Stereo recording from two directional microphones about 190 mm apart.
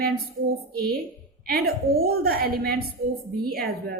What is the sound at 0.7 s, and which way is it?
A woman's voice, 50° right (ahead or behind).